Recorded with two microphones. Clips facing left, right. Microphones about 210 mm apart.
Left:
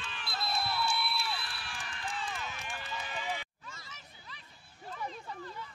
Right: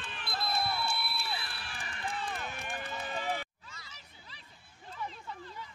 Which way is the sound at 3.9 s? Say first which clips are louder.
Left 3 dB; 30° right (ahead or behind).